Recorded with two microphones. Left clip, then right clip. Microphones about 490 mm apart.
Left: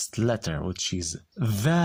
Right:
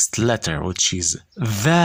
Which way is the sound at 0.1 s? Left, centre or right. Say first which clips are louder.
Right 7 dB; left.